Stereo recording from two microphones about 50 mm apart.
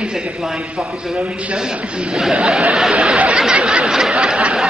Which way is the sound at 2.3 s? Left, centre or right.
Centre.